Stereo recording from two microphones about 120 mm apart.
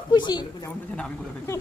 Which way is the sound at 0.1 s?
35° left (ahead or behind).